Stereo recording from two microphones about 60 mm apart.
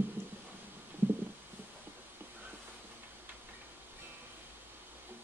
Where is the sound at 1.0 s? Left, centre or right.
Right.